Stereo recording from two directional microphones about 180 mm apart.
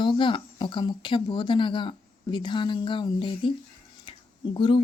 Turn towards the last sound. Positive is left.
turn(degrees=25)  # may be behind; listen again after turning